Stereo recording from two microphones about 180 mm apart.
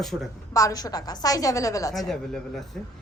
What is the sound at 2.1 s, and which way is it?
Speech, 5° left (ahead or behind).